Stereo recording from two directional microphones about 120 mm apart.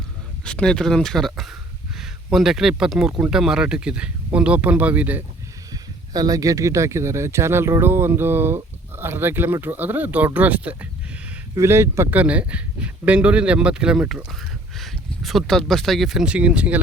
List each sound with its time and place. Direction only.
0.4 s a man's voice: 5° left (ahead or behind); by 5.2 s 15° right (ahead or behind)
5.7 s a man's voice: 30° right (ahead or behind); by 16.8 s 10° right (ahead or behind)